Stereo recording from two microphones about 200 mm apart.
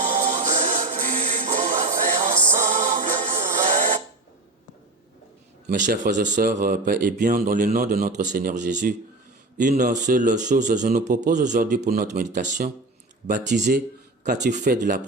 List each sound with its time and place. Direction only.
0.0 s music: 35° right (ahead or behind)
5.6 s speech: 45° right (ahead or behind)